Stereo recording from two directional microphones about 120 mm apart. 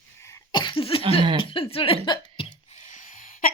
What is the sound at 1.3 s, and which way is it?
Speech, 50° left (ahead or behind).